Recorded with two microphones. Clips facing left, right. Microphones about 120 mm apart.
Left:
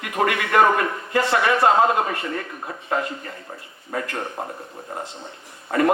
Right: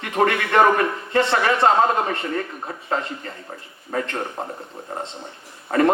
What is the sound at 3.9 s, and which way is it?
Speech, 30° right (ahead or behind).